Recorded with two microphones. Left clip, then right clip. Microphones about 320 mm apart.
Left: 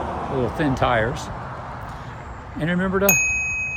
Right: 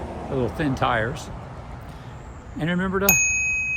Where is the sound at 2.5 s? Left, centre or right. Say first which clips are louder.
Left 2 dB; centre.